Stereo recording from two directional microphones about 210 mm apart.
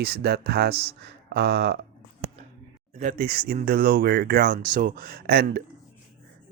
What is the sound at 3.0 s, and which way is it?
Speech, 40° right (ahead or behind).